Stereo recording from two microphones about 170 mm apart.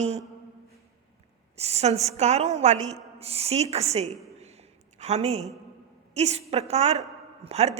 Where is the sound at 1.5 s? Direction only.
40° right (ahead or behind).